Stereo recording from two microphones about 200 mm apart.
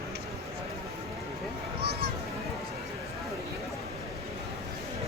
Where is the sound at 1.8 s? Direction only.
55° right (ahead or behind).